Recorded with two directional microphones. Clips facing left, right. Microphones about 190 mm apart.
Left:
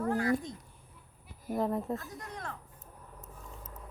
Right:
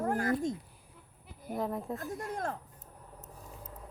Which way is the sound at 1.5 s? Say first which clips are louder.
Left 3 dB; centre (ahead or behind).